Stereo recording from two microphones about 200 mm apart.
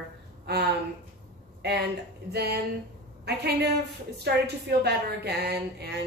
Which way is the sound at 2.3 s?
55° right (ahead or behind).